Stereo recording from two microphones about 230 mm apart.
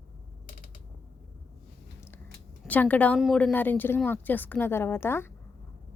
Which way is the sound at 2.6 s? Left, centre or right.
Centre.